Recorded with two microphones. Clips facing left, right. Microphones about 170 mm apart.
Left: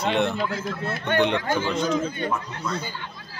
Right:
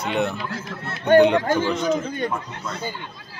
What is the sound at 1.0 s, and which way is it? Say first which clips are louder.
Speech: right 8 dB; 40° right (ahead or behind).